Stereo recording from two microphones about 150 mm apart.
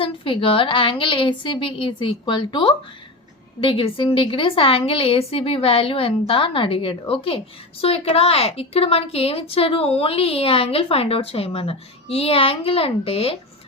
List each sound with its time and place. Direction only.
0.0 s a woman's voice: 35° left (ahead or behind)